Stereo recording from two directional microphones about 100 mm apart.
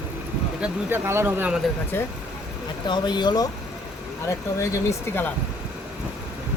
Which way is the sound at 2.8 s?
50° left (ahead or behind).